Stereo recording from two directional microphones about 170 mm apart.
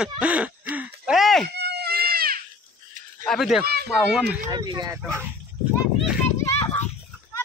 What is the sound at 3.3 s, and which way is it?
Speech, centre (ahead or behind).